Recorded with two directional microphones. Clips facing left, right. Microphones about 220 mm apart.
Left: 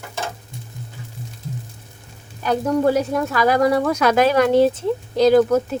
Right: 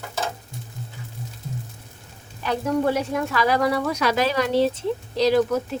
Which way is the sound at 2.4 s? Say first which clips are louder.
Left 4 dB; 40° left (ahead or behind).